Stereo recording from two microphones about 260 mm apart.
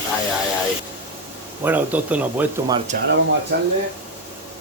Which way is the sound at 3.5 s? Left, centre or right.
Right.